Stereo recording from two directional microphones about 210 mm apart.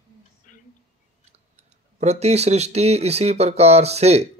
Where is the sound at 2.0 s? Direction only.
30° right (ahead or behind).